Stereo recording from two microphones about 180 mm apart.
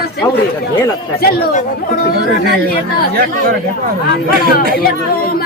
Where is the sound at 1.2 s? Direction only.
55° left (ahead or behind).